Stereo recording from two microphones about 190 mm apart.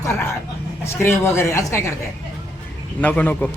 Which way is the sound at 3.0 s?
10° left (ahead or behind).